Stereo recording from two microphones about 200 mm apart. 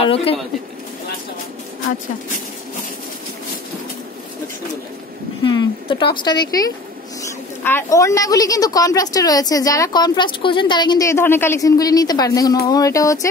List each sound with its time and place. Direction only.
0.0 s a woman's voice: 30° left (ahead or behind)
5.4 s a woman's voice: 20° left (ahead or behind)